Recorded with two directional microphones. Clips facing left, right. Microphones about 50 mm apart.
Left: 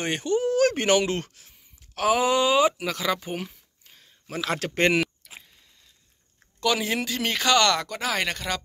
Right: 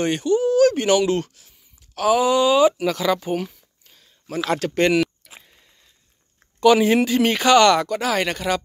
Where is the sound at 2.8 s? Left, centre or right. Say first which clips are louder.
Right 6 dB; centre; by 5.0 s left.